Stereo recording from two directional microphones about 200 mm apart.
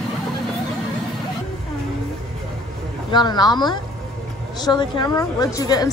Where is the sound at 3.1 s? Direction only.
20° left (ahead or behind).